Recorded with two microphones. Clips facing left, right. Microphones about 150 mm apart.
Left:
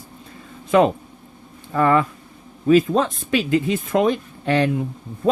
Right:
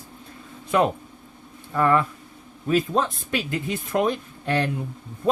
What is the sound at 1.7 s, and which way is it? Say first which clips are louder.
Speech: left 3 dB; 90° left.